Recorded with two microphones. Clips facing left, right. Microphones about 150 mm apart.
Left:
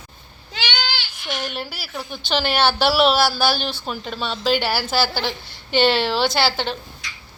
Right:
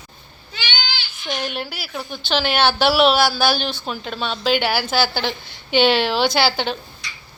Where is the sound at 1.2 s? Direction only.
5° left (ahead or behind).